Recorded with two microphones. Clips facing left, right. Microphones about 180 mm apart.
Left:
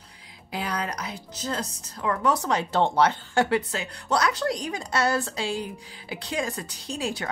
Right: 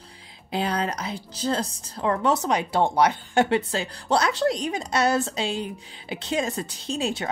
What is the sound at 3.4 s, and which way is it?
A woman's voice, 25° right (ahead or behind).